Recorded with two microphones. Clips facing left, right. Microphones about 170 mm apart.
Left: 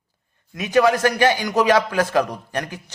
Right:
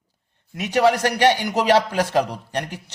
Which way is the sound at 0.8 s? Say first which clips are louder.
Right 5 dB; 25° right (ahead or behind).